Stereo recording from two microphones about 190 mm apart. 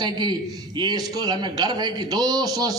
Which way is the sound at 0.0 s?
25° right (ahead or behind).